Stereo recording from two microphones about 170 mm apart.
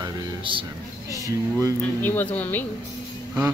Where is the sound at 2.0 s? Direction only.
10° left (ahead or behind).